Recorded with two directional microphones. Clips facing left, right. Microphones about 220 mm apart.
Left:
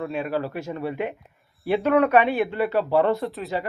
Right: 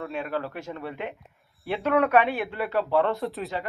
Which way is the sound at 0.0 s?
Centre (ahead or behind).